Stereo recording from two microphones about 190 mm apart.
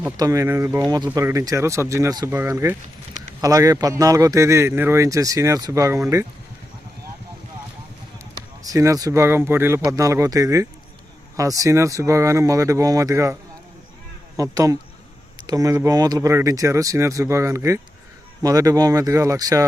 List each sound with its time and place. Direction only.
0.2 s speech: 15° right (ahead or behind)
8.6 s speech: 15° right (ahead or behind)
14.3 s speech: 15° right (ahead or behind)